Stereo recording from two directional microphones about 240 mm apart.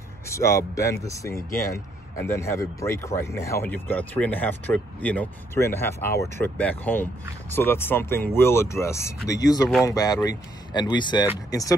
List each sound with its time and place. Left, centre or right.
0.3 s speech: centre